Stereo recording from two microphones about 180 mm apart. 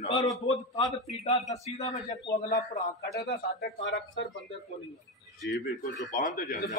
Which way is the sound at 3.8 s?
90° left.